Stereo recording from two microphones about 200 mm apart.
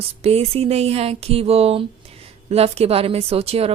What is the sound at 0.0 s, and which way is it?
A woman's voice, 30° right (ahead or behind).